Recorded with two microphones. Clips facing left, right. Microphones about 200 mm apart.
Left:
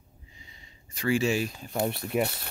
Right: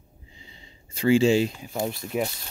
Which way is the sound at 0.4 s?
30° right (ahead or behind).